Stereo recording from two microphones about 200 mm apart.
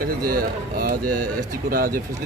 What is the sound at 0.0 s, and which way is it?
A man's voice, 50° right (ahead or behind).